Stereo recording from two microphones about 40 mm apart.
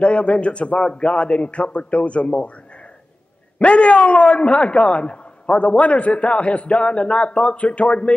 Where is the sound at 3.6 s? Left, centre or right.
Left.